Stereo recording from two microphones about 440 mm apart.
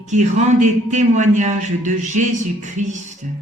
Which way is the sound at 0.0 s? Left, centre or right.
Centre.